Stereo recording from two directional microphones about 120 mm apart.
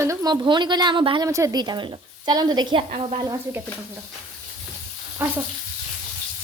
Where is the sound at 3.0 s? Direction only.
55° right (ahead or behind).